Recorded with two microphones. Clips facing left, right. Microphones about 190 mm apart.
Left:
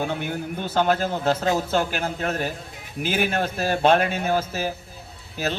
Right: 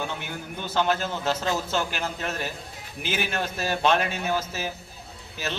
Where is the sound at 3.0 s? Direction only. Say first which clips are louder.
Left 5 dB; 50° left (ahead or behind).